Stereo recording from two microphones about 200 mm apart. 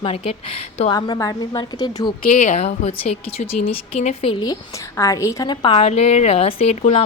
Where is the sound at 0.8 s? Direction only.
25° left (ahead or behind).